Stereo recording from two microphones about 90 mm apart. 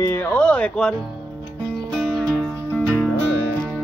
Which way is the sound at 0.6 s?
10° left (ahead or behind).